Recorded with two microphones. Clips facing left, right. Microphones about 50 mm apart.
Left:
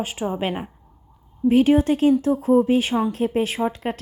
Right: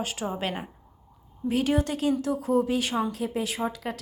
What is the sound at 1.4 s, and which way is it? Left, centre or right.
A woman's voice, left.